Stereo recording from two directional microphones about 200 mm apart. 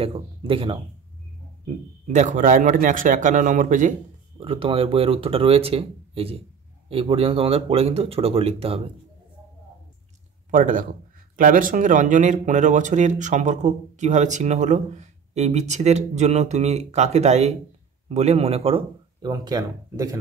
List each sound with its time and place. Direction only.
0.0 s speech: 25° right (ahead or behind)
4.4 s speech: 25° right (ahead or behind)
10.5 s speech: 40° right (ahead or behind); by 20.2 s 20° right (ahead or behind)